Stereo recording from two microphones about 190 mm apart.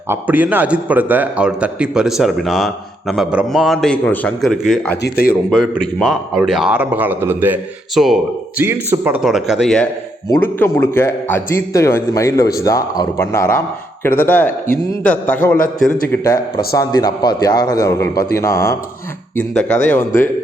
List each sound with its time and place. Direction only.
0.1 s a man's voice: 10° right (ahead or behind)
5.0 s speech: 55° left (ahead or behind)
5.3 s a man's voice: centre (ahead or behind)
8.6 s a man's voice: 10° right (ahead or behind)
10.2 s a man's voice: 15° left (ahead or behind)
16.7 s a man's voice: 20° left (ahead or behind)